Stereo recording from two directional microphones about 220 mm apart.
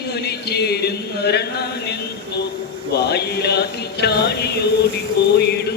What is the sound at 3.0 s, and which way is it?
Speech, 50° left (ahead or behind).